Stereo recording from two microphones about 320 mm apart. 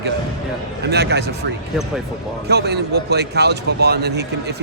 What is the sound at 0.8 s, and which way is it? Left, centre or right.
Speech, right.